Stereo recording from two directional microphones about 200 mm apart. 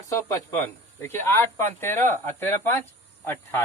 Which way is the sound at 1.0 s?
10° left (ahead or behind).